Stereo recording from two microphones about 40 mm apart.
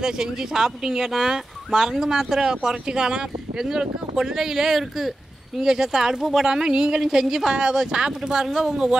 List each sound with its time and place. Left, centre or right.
0.0 s speech: centre
7.0 s speech: centre
8.5 s speech: centre